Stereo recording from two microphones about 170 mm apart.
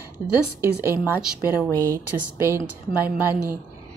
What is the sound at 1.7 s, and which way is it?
A woman's voice, 20° right (ahead or behind).